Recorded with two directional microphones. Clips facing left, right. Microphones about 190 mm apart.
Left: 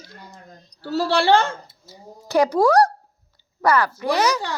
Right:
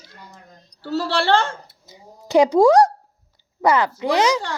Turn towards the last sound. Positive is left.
turn(degrees=-25)  # may be behind; listen again after turning